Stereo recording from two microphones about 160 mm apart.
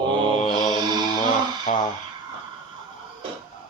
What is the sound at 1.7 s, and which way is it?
Speech, 50° left (ahead or behind).